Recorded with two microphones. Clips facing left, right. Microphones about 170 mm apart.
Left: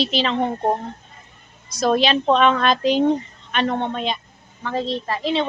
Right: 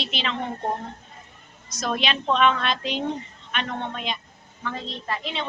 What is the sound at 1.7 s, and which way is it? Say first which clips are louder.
A woman's voice: left 8 dB; 35° left (ahead or behind).